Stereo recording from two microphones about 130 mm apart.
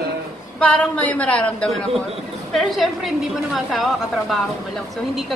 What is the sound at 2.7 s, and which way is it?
A woman's voice, centre (ahead or behind).